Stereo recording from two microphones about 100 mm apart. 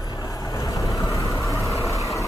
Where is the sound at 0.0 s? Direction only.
40° left (ahead or behind).